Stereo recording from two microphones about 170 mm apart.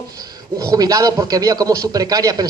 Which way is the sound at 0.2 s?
20° right (ahead or behind).